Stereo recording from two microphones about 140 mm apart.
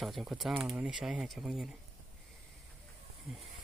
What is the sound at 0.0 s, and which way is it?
Speech, centre (ahead or behind).